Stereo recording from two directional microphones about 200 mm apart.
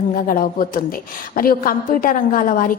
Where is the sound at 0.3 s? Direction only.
45° left (ahead or behind).